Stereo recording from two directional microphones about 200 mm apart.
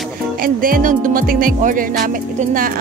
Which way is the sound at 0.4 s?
45° right (ahead or behind).